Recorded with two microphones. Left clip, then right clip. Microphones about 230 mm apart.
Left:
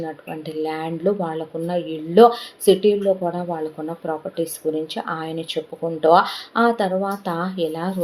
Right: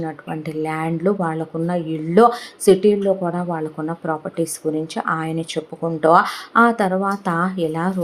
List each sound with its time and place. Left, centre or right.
0.6 s speech: right